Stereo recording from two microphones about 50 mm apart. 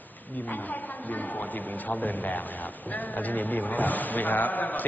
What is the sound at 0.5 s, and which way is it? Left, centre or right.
A woman's voice, left.